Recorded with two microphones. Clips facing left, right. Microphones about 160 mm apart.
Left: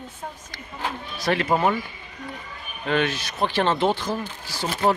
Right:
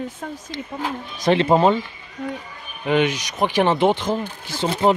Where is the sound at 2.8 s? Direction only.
15° right (ahead or behind).